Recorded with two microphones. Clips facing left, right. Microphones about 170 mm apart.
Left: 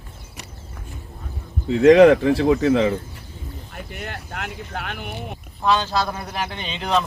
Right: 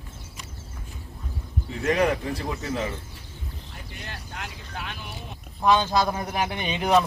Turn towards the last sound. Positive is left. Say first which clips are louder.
# right 2 dB
turn(degrees=-15)  # may be behind; listen again after turning